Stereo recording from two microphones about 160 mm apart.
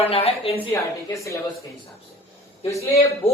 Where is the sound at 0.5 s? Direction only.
15° left (ahead or behind).